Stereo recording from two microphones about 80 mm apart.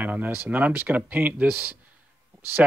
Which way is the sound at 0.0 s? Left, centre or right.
Right.